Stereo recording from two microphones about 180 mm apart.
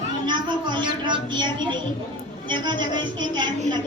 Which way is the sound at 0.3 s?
25° right (ahead or behind).